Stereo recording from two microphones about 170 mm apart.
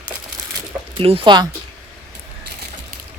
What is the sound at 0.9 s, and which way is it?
Speech, 35° right (ahead or behind).